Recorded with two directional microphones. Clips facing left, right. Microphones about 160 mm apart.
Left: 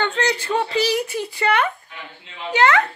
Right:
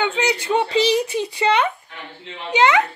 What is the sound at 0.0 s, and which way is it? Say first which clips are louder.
Speech: right 1 dB; 10° right (ahead or behind).